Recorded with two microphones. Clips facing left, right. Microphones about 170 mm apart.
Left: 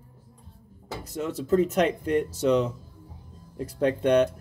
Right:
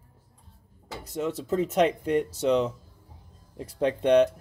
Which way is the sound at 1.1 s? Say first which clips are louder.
Left 3 dB; 20° right (ahead or behind).